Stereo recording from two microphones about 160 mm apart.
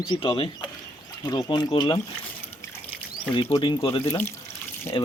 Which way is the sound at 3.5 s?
30° left (ahead or behind).